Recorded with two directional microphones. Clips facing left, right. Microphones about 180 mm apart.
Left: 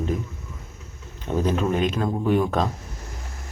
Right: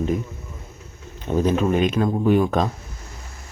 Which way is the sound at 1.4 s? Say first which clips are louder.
Right 3 dB; 5° right (ahead or behind).